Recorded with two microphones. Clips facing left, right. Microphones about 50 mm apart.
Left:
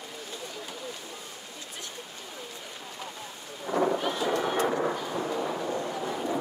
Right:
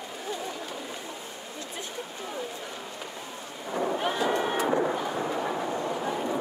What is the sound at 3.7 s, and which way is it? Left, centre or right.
Thunder, centre.